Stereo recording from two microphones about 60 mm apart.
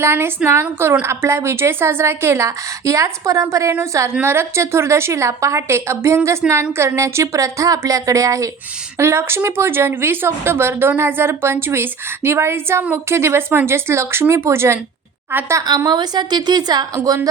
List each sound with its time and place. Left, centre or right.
0.0 s speech: right
4.1 s speech: right
9.0 s speech: right
16.6 s a woman's voice: right